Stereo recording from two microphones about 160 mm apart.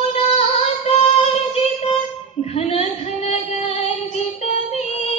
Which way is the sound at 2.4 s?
40° left (ahead or behind).